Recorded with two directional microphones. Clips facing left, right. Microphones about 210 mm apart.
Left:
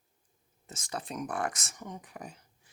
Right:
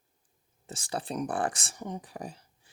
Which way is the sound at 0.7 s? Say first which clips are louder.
Right 4 dB; 30° right (ahead or behind).